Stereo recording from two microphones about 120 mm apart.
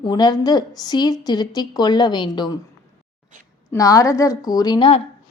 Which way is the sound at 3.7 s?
30° left (ahead or behind).